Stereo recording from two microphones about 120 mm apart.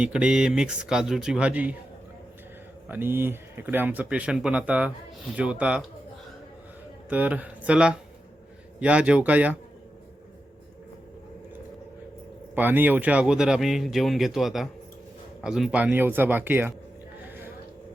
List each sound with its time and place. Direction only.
0.0 s speech: 10° right (ahead or behind)
2.9 s speech: 20° right (ahead or behind)
7.1 s speech: 10° right (ahead or behind)
12.5 s speech: 15° right (ahead or behind)